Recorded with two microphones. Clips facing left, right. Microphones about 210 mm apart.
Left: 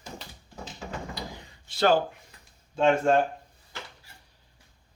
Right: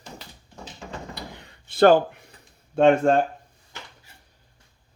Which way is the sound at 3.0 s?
55° right (ahead or behind).